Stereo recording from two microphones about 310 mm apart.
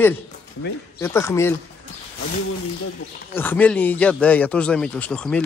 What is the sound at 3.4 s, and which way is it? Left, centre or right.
Speech, centre.